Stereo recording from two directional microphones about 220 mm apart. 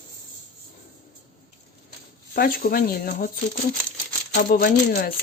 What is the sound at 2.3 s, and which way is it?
Speech, 40° left (ahead or behind).